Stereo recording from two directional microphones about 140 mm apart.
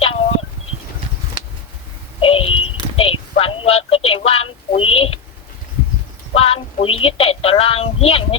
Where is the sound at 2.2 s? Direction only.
40° left (ahead or behind).